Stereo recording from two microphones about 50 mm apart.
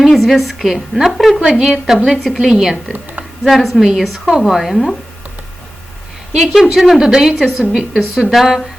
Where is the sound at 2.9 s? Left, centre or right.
Right.